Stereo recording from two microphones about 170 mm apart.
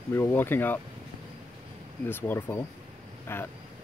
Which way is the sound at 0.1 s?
15° left (ahead or behind).